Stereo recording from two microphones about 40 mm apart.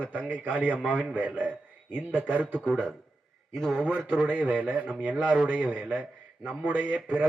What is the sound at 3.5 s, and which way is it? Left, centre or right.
Speech, centre.